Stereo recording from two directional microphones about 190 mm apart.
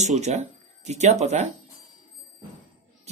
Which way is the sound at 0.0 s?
35° right (ahead or behind).